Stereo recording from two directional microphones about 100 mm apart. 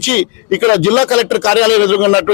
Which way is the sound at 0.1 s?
10° left (ahead or behind).